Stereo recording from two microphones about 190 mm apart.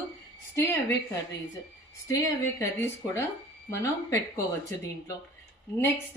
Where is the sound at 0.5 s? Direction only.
15° left (ahead or behind).